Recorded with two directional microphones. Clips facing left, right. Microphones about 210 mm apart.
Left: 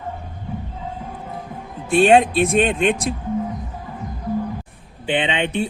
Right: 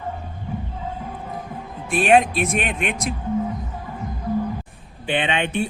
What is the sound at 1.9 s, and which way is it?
Speech, 30° left (ahead or behind).